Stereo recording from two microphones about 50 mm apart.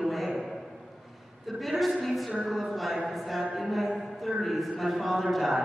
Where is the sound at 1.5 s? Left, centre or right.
Centre.